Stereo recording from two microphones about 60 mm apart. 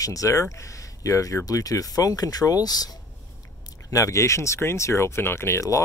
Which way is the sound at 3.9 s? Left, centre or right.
Left.